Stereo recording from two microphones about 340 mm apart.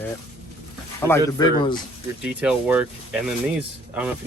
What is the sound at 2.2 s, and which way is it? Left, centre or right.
Speech, centre.